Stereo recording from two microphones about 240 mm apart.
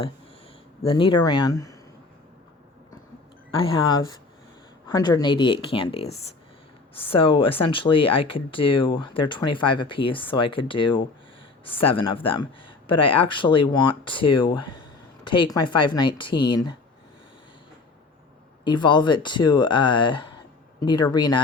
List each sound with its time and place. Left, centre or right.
0.8 s speech: left
3.5 s speech: left
18.6 s speech: centre